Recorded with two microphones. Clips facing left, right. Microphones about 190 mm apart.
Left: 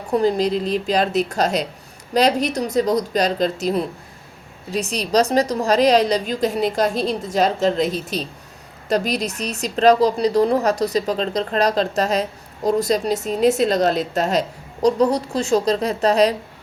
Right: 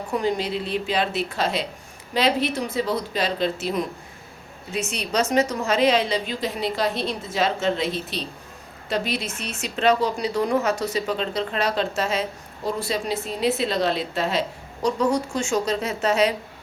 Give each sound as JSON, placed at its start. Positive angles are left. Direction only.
{"t": 0.2, "sound": "a woman's voice", "side_deg": 35}